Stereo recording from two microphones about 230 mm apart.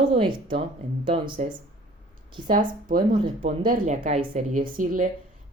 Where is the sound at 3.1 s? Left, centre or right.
Right.